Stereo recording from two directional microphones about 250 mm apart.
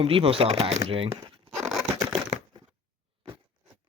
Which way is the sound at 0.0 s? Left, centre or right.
Right.